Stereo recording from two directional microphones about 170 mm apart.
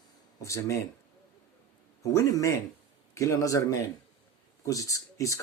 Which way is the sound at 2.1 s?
20° left (ahead or behind).